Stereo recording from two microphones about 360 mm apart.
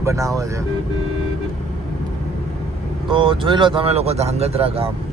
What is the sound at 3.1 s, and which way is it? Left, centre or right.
Speech, centre.